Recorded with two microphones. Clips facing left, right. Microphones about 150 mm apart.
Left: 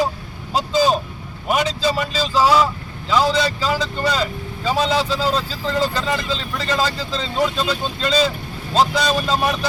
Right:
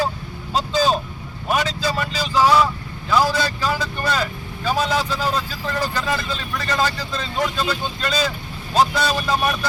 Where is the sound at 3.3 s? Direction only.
20° left (ahead or behind).